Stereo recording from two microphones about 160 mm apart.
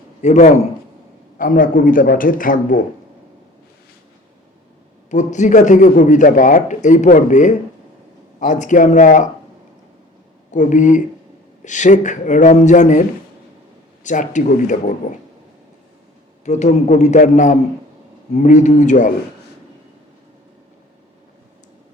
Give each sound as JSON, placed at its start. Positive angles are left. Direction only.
{"t": 0.2, "sound": "a man's voice", "side_deg": 50}
{"t": 5.1, "sound": "speech", "side_deg": 50}
{"t": 10.5, "sound": "speech", "side_deg": 50}
{"t": 16.4, "sound": "speech", "side_deg": 45}